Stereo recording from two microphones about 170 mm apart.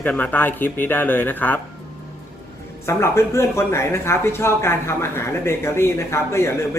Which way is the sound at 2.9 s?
15° left (ahead or behind).